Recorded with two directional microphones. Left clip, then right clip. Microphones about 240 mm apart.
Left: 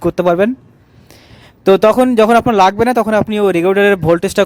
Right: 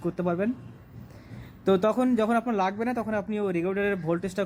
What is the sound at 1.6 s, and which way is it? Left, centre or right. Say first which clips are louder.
Speech: left 14 dB; left.